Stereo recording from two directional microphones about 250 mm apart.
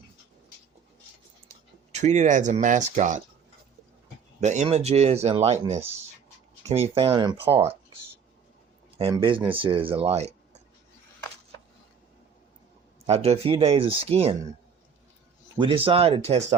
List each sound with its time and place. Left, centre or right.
1.9 s speech: right
4.4 s speech: right
9.0 s speech: right
13.1 s speech: right
15.5 s speech: centre